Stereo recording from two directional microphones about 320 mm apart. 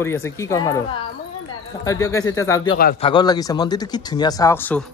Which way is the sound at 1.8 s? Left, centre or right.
Centre.